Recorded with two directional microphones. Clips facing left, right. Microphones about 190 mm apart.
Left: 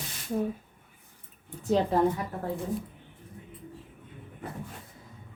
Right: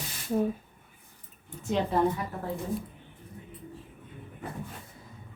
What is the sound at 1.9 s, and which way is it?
Speech, 40° left (ahead or behind).